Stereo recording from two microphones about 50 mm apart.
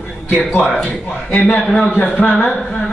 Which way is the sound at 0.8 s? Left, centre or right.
Left.